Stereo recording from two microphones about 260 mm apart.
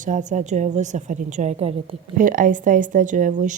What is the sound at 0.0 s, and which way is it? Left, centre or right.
A woman's voice, right.